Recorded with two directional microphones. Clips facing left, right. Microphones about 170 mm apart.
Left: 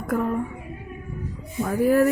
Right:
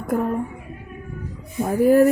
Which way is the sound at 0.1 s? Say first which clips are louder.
Right 2 dB; 25° right (ahead or behind).